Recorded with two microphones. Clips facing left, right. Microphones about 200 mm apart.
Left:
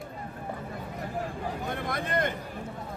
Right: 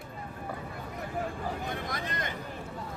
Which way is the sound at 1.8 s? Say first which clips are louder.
Left 7 dB; 55° left (ahead or behind).